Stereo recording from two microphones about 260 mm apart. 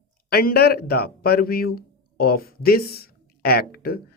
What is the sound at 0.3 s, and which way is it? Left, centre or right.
A man's voice, left.